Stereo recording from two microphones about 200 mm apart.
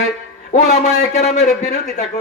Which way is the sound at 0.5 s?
35° left (ahead or behind).